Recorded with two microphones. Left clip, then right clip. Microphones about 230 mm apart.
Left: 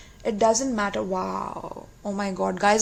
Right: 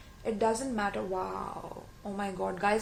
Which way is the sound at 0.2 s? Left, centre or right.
Left.